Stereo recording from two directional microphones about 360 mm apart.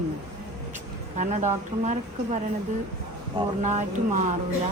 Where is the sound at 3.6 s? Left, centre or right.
Centre.